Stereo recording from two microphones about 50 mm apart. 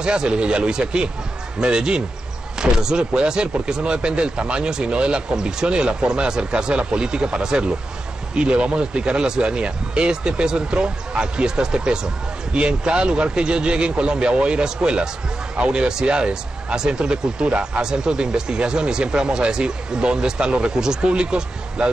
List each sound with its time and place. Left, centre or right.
0.0 s a man's voice: centre